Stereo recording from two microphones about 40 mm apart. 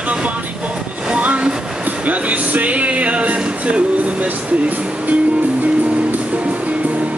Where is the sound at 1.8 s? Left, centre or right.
Right.